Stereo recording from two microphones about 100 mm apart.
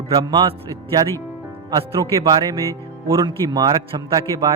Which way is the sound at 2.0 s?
40° right (ahead or behind).